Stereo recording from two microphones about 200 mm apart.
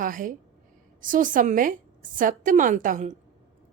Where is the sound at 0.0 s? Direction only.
40° right (ahead or behind).